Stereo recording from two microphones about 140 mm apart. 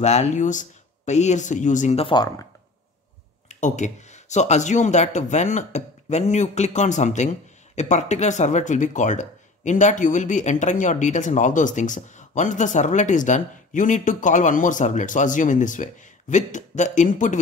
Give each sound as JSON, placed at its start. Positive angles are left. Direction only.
{"t": 0.0, "sound": "speech", "side_deg": 55}
{"t": 2.0, "sound": "speech", "side_deg": 40}
{"t": 3.4, "sound": "speech", "side_deg": 60}